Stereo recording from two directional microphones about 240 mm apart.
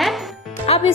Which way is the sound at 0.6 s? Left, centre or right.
Left.